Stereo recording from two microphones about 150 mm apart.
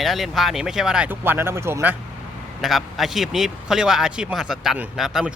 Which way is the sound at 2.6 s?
Centre (ahead or behind).